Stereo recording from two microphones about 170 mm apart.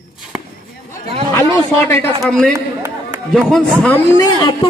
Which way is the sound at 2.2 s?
5° left (ahead or behind).